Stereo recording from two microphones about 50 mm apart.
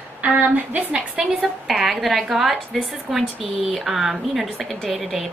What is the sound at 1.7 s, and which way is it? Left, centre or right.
A woman's voice, centre.